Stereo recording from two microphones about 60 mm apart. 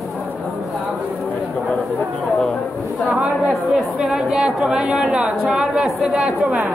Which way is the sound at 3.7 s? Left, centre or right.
Centre.